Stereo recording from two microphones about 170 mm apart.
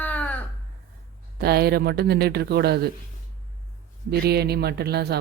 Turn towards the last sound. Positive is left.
turn(degrees=-70)  # may be behind; listen again after turning